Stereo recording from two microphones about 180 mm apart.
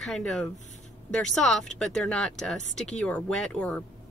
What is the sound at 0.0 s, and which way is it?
Speech, 5° left (ahead or behind).